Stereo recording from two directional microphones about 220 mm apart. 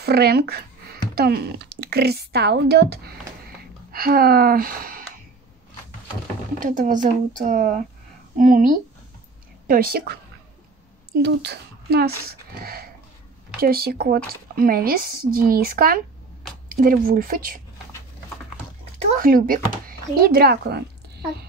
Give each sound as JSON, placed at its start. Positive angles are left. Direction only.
{"t": 0.0, "sound": "speech", "side_deg": -45}
{"t": 6.6, "sound": "speech", "side_deg": -35}
{"t": 11.2, "sound": "speech", "side_deg": -50}
{"t": 19.1, "sound": "speech", "side_deg": -40}